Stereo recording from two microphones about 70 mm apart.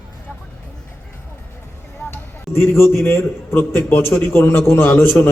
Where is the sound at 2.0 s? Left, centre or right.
Left.